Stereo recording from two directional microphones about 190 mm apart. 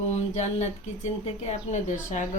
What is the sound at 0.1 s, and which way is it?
Speech, 35° left (ahead or behind).